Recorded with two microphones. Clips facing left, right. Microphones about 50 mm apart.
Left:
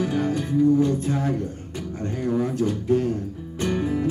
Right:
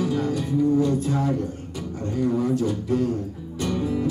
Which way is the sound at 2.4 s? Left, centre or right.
Left.